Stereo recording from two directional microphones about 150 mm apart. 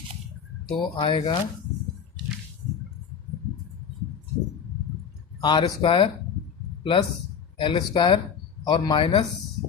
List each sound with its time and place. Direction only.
0.8 s speech: 35° left (ahead or behind)
5.4 s speech: 30° left (ahead or behind)